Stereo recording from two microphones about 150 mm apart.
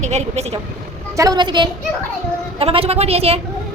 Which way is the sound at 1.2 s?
25° right (ahead or behind).